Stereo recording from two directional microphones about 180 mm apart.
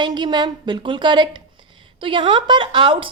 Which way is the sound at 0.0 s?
25° right (ahead or behind).